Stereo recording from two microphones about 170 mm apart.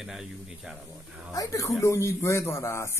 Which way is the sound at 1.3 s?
20° left (ahead or behind).